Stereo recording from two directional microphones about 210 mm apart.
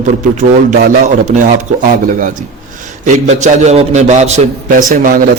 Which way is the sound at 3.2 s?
35° right (ahead or behind).